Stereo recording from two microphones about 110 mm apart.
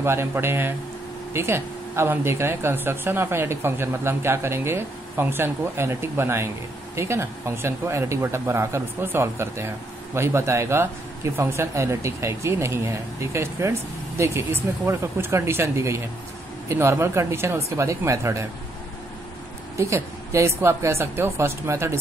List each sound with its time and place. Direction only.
0.0 s speech: 20° right (ahead or behind)
19.8 s speech: 25° right (ahead or behind)